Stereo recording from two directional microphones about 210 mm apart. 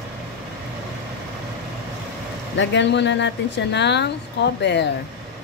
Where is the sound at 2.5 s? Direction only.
55° left (ahead or behind).